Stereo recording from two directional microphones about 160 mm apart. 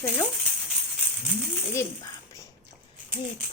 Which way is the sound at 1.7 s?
20° left (ahead or behind).